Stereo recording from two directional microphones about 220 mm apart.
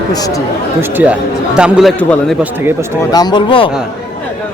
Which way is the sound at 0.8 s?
10° right (ahead or behind).